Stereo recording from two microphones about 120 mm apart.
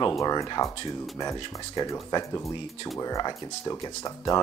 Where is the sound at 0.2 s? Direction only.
30° left (ahead or behind).